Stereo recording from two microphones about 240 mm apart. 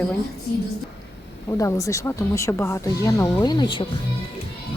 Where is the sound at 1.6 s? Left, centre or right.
Centre.